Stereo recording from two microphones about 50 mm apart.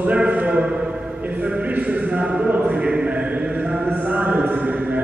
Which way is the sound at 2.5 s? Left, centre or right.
Right.